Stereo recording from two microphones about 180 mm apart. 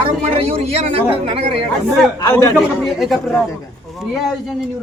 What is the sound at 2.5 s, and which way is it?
Speech, centre (ahead or behind).